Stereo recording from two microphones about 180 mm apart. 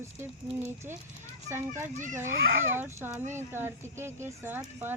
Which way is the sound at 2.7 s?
10° right (ahead or behind).